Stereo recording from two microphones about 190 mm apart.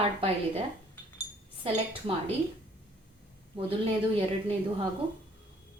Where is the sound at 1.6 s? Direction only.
30° right (ahead or behind).